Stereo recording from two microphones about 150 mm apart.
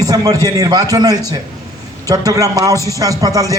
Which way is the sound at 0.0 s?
25° right (ahead or behind).